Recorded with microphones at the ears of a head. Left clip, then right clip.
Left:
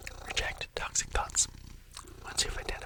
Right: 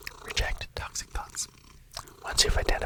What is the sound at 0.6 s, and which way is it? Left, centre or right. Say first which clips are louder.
Whispering: left 1 dB; centre.